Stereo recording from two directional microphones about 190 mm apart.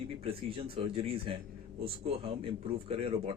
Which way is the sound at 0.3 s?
30° right (ahead or behind).